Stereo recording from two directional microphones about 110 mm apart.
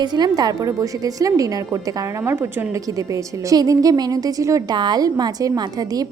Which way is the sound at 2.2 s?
20° right (ahead or behind).